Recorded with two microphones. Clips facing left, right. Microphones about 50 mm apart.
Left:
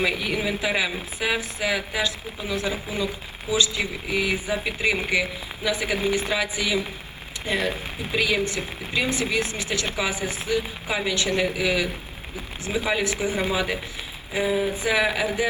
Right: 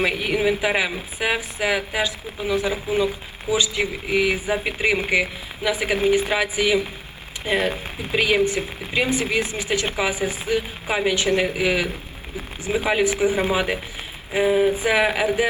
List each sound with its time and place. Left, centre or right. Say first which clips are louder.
0.0 s speech: right 4 dB; right